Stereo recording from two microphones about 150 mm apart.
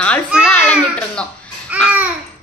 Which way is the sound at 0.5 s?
10° left (ahead or behind).